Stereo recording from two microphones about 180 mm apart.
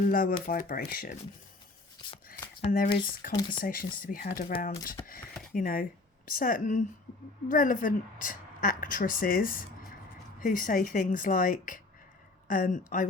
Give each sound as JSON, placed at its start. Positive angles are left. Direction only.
{"t": 0.0, "sound": "a woman's voice", "side_deg": 50}
{"t": 2.6, "sound": "a woman's voice", "side_deg": 50}
{"t": 5.0, "sound": "a sound", "side_deg": 20}
{"t": 5.5, "sound": "a woman's voice", "side_deg": 50}